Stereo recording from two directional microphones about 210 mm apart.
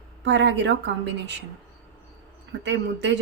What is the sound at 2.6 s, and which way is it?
Speech, 60° right (ahead or behind).